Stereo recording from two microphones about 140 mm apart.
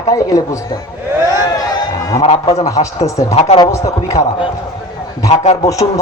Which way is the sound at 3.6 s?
25° left (ahead or behind).